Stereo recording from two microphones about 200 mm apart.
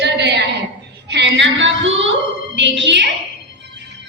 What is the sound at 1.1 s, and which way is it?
Female singing, 60° right (ahead or behind).